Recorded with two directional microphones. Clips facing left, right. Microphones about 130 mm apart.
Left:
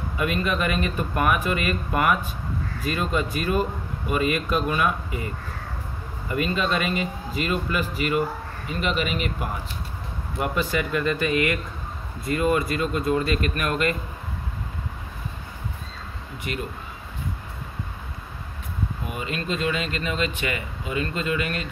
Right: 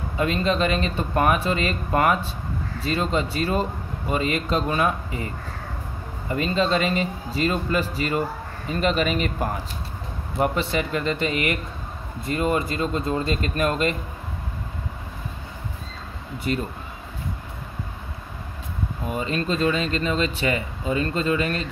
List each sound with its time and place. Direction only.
0.2 s speech: 30° right (ahead or behind)
6.2 s speech: 30° right (ahead or behind)
10.4 s speech: 30° right (ahead or behind)
16.5 s speech: 35° right (ahead or behind)
19.0 s speech: 35° right (ahead or behind)